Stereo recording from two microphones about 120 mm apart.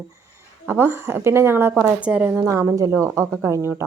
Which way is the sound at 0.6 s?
20° right (ahead or behind).